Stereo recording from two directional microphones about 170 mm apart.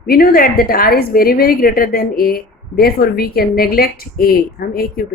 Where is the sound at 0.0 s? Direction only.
60° left (ahead or behind).